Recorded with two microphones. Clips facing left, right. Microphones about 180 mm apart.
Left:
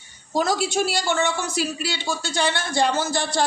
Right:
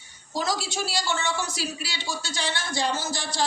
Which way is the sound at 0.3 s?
55° left (ahead or behind).